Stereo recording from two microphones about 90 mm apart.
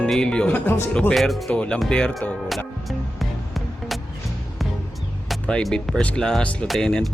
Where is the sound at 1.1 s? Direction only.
Centre (ahead or behind).